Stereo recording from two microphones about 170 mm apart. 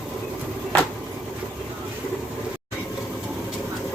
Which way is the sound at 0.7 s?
10° left (ahead or behind).